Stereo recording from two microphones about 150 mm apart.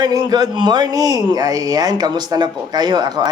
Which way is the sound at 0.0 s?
25° right (ahead or behind).